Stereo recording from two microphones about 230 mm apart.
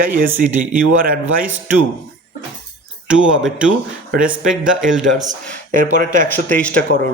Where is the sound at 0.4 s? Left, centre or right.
Centre.